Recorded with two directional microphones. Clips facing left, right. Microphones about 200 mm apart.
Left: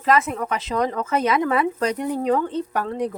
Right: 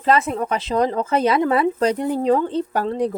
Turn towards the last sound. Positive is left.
turn(degrees=-30)  # may be behind; listen again after turning